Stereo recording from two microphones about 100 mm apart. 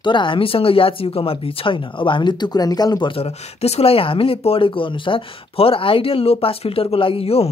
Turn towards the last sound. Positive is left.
turn(degrees=80)